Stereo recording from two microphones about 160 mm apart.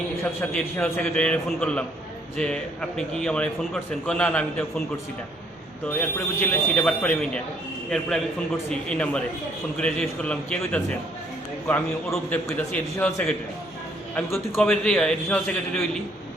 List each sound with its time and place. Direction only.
0.6 s a man's voice: 15° left (ahead or behind)
5.9 s a man's voice: 10° left (ahead or behind)
14.6 s a man's voice: 5° left (ahead or behind)